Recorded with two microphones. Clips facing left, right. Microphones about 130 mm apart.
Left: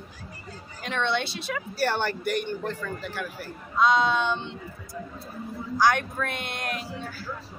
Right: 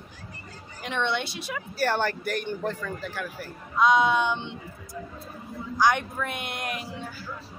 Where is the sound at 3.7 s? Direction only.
15° right (ahead or behind).